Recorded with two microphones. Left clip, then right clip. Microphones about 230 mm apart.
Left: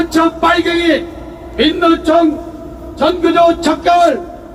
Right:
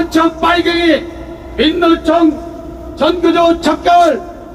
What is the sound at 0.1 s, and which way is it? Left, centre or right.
Speech, centre.